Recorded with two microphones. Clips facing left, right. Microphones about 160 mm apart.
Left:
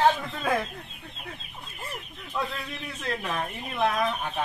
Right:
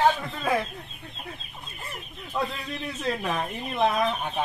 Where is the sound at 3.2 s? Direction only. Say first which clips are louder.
Right 3 dB; 15° right (ahead or behind).